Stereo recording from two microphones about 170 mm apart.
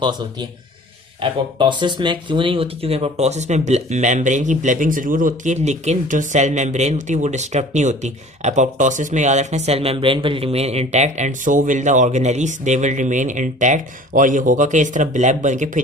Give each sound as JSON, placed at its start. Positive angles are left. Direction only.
{"t": 0.0, "sound": "a man's voice", "side_deg": -25}